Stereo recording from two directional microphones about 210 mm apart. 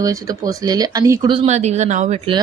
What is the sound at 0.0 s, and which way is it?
Speech, 15° right (ahead or behind).